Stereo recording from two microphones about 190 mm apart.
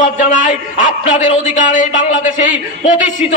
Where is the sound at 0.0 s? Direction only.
45° left (ahead or behind).